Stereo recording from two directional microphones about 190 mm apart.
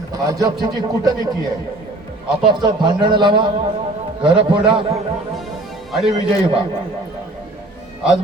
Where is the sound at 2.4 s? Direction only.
25° right (ahead or behind).